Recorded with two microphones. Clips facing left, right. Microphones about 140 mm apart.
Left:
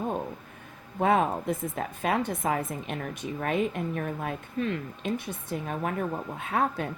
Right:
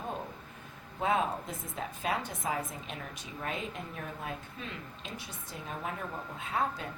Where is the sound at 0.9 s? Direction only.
55° left (ahead or behind).